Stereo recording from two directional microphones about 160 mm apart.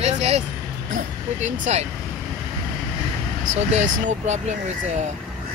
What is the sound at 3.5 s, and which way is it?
Speech, 45° right (ahead or behind).